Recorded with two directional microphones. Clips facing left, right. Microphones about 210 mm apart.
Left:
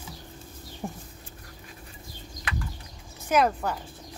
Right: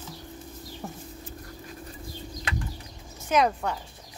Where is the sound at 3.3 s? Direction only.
5° left (ahead or behind).